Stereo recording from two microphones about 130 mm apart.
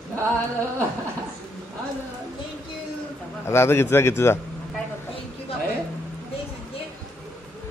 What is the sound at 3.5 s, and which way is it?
Speech, 20° left (ahead or behind).